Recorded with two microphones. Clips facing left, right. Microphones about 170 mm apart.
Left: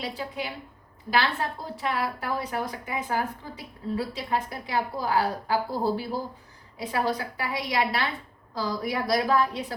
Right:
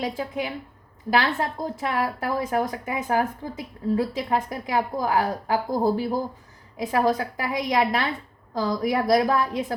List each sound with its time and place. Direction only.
0.0 s a woman's voice: 45° right (ahead or behind)